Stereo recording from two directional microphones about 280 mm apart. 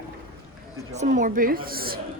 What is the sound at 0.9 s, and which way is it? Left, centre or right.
A woman's voice, right.